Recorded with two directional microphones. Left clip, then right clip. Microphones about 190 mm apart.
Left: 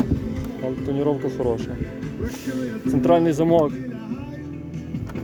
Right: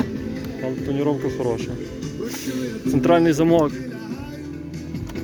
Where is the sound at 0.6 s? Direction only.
20° left (ahead or behind); by 4.1 s 5° left (ahead or behind).